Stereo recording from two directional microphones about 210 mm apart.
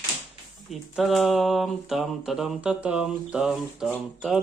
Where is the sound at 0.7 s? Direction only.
Centre (ahead or behind).